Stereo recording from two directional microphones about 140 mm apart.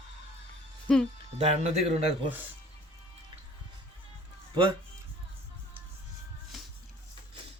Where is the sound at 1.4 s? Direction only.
50° right (ahead or behind).